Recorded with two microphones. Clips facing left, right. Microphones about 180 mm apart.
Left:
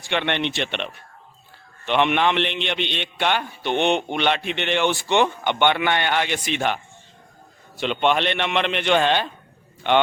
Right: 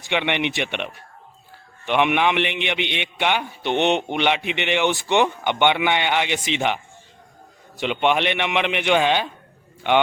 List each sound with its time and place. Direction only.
0.0 s a man's voice: 15° right (ahead or behind)
7.8 s a man's voice: 15° right (ahead or behind)